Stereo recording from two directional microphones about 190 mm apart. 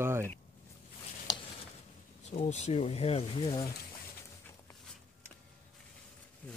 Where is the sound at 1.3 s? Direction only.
20° left (ahead or behind).